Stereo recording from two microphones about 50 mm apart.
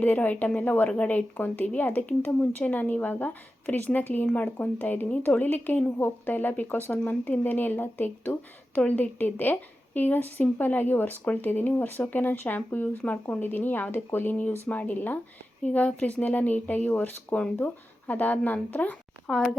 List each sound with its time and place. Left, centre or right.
0.0 s speech: left
15.6 s speech: left
19.3 s speech: centre